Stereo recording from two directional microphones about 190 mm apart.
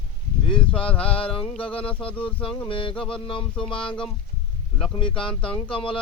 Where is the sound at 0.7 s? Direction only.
5° left (ahead or behind).